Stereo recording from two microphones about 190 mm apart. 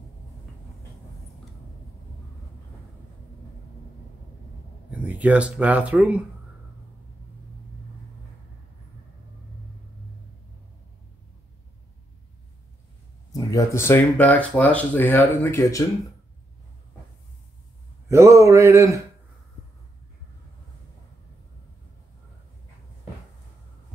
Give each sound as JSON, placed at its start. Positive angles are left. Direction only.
{"t": 4.9, "sound": "speech", "side_deg": -10}
{"t": 13.3, "sound": "speech", "side_deg": 20}
{"t": 18.0, "sound": "speech", "side_deg": -15}